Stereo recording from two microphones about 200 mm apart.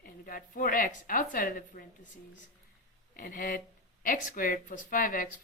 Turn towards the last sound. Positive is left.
turn(degrees=45)  # may be behind; listen again after turning